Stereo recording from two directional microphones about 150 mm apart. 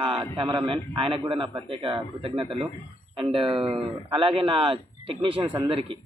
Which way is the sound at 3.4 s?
35° right (ahead or behind).